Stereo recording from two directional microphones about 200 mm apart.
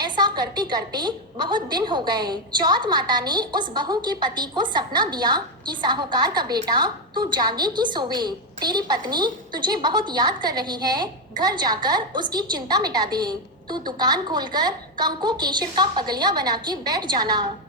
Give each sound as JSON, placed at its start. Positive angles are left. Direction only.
{"t": 0.0, "sound": "a woman's voice", "side_deg": -20}